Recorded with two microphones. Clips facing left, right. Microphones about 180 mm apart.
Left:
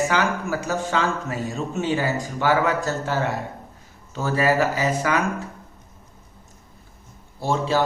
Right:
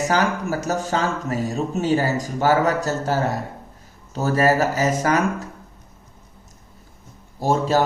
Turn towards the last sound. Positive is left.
turn(degrees=-45)  # may be behind; listen again after turning